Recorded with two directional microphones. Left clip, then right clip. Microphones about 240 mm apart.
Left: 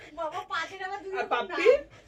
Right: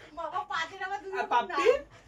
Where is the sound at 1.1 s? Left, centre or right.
Centre.